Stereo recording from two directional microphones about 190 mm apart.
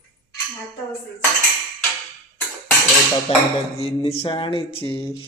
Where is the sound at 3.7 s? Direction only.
30° left (ahead or behind).